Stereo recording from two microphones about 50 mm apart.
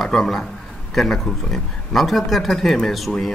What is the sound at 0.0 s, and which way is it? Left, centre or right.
A man's voice, centre.